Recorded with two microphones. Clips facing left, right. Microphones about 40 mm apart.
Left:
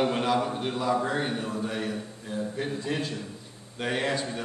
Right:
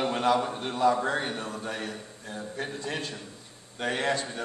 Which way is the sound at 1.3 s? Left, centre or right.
Centre.